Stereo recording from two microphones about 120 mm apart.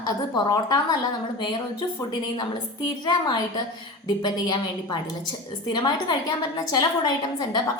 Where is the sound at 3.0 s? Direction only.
35° left (ahead or behind).